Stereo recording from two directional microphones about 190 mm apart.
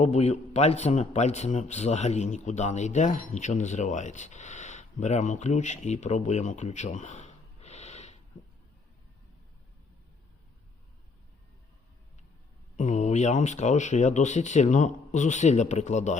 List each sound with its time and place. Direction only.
0.0 s speech: 35° left (ahead or behind)
12.7 s speech: 40° left (ahead or behind)